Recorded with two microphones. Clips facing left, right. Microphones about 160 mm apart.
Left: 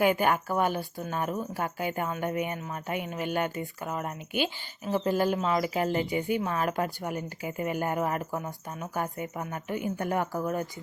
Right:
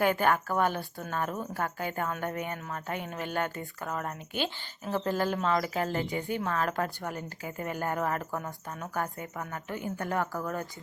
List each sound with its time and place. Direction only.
0.0 s speech: 10° left (ahead or behind)
0.7 s speech: centre (ahead or behind)
1.1 s speech: 15° left (ahead or behind)